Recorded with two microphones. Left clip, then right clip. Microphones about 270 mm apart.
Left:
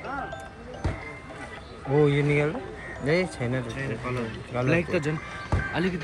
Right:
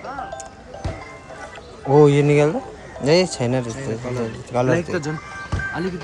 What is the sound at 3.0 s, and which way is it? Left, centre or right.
A man's voice, right.